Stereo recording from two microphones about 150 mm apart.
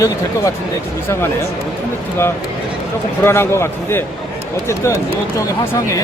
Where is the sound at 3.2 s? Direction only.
15° left (ahead or behind).